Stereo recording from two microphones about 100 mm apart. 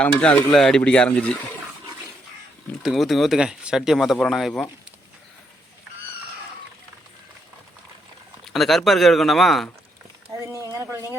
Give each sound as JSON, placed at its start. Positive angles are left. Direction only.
{"t": 0.0, "sound": "speech", "side_deg": 10}
{"t": 2.8, "sound": "speech", "side_deg": 0}
{"t": 8.4, "sound": "speech", "side_deg": 0}
{"t": 10.3, "sound": "a sound", "side_deg": -35}